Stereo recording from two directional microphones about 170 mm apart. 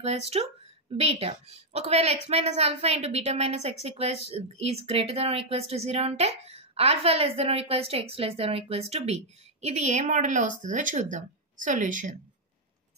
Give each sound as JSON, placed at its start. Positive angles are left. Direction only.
{"t": 0.0, "sound": "a woman's voice", "side_deg": -35}